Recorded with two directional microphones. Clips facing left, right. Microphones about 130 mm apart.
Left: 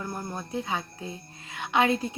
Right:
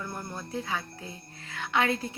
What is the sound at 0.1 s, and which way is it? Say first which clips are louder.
Speech: left 3 dB; 15° left (ahead or behind).